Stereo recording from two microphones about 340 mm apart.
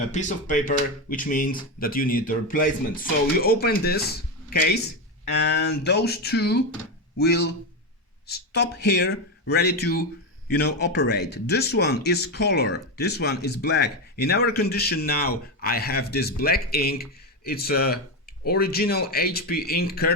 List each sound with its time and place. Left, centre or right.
0.1 s speech: left